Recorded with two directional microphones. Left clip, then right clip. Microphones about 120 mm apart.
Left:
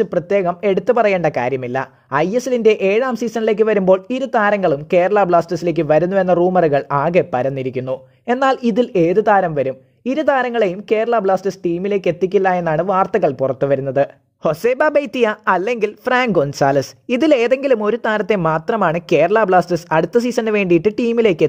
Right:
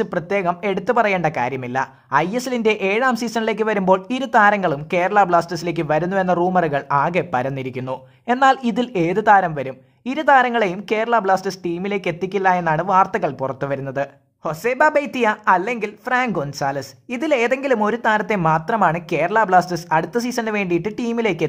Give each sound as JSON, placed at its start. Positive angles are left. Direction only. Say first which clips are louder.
{"t": 0.0, "sound": "speech", "louder": "left 4 dB", "side_deg": 25}
{"t": 2.3, "sound": "speech", "louder": "left 5 dB", "side_deg": 20}
{"t": 6.6, "sound": "speech", "louder": "left 3 dB", "side_deg": 25}
{"t": 14.4, "sound": "speech", "louder": "left 2 dB", "side_deg": 45}
{"t": 17.2, "sound": "speech", "louder": "left 4 dB", "side_deg": 40}
{"t": 18.0, "sound": "speech", "louder": "left 1 dB", "side_deg": 45}